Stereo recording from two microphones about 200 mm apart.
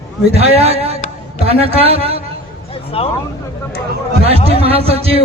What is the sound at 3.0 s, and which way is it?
Speech, 30° left (ahead or behind).